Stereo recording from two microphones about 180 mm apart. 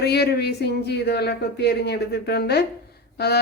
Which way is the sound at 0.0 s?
65° left (ahead or behind).